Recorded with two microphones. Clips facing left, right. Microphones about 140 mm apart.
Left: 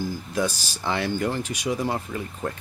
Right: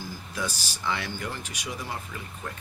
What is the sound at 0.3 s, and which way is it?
Speech, 45° left (ahead or behind).